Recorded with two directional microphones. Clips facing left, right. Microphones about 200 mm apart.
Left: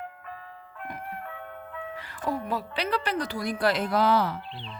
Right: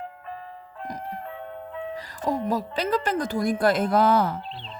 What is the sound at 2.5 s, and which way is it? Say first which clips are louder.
A woman's voice: right 4 dB; 45° right (ahead or behind).